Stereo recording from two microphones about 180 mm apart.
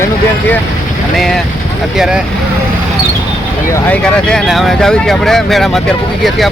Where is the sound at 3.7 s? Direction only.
10° left (ahead or behind).